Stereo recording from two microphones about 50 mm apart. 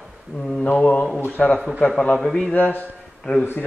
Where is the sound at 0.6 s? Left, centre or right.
Left.